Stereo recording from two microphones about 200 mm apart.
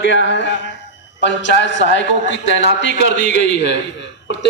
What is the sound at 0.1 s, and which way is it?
A man's voice, 65° left (ahead or behind).